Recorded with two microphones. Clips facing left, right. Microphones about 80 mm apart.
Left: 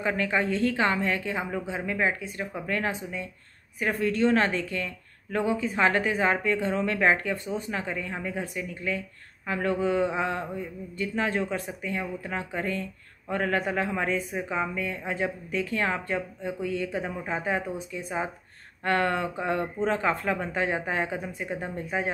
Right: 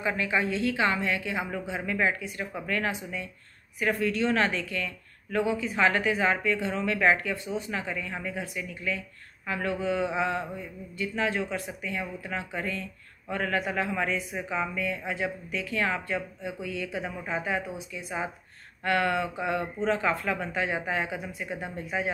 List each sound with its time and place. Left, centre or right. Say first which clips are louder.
0.0 s a woman's voice: left 1 dB; left